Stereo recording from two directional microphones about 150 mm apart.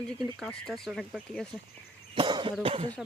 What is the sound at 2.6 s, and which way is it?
Speech, 40° right (ahead or behind).